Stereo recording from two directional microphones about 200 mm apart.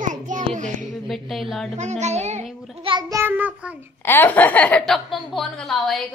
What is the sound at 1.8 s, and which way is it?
Speech, 35° right (ahead or behind).